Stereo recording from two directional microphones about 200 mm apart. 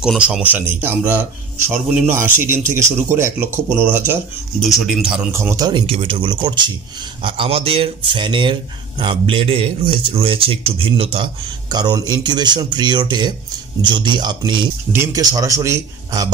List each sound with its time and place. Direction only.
0.0 s speech: 5° right (ahead or behind)
4.6 s speech: centre (ahead or behind); by 16.3 s 15° right (ahead or behind)